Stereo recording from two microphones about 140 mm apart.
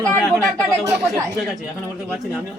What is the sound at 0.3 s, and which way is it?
Speech, 25° right (ahead or behind).